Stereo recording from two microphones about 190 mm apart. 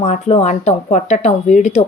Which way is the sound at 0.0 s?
35° left (ahead or behind).